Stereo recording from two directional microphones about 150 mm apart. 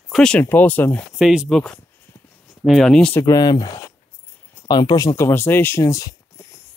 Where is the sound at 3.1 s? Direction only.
20° left (ahead or behind).